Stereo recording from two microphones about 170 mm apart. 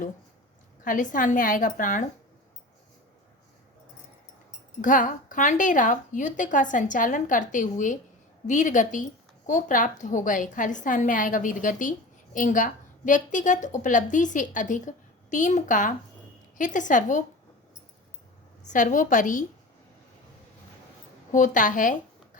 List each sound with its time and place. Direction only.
0.9 s a woman's voice: 50° left (ahead or behind)
4.8 s a woman's voice: 50° left (ahead or behind)
18.7 s a woman's voice: 50° left (ahead or behind)
21.3 s a woman's voice: 50° left (ahead or behind)